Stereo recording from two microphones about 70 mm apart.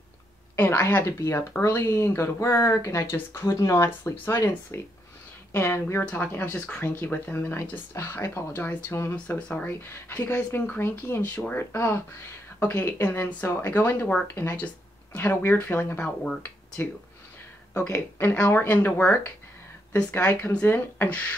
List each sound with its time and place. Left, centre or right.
0.6 s speech: left
1.0 s speech: left
6.5 s speech: centre
6.8 s speech: left
9.1 s speech: left
17.7 s speech: left